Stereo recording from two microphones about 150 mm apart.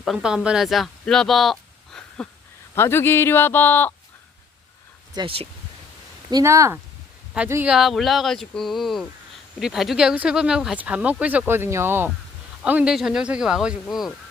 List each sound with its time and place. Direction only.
0.0 s speech: 5° right (ahead or behind)
2.7 s speech: 15° left (ahead or behind)
5.1 s speech: 35° right (ahead or behind)
6.3 s speech: 20° right (ahead or behind)
7.7 s speech: centre (ahead or behind)